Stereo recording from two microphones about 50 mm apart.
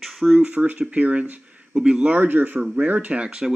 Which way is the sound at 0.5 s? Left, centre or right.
Right.